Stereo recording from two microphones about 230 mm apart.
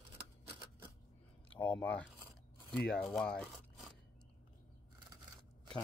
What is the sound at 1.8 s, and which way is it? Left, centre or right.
Speech, centre.